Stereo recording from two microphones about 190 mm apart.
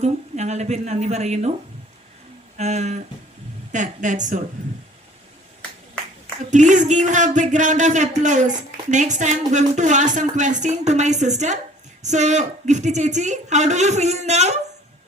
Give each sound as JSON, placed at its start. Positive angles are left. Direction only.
{"t": 0.0, "sound": "speech", "side_deg": -35}
{"t": 2.6, "sound": "speech", "side_deg": -35}
{"t": 6.5, "sound": "speech", "side_deg": -40}